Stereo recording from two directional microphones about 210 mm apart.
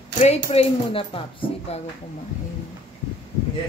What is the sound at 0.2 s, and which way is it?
Speech, 30° left (ahead or behind).